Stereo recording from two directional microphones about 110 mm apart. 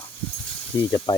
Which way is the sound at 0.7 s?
45° left (ahead or behind).